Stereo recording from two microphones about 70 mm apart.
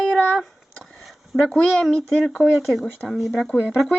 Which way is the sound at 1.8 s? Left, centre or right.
Centre.